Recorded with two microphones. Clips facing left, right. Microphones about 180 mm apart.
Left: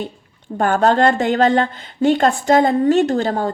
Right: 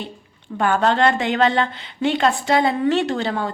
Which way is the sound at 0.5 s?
45° left (ahead or behind).